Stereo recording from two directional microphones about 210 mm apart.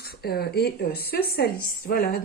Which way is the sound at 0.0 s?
50° left (ahead or behind).